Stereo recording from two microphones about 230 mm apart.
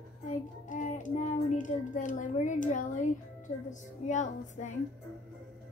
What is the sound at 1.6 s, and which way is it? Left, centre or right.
Speech, left.